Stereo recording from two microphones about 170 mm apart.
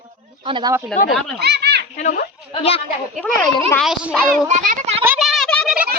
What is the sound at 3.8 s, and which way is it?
Speech, centre (ahead or behind).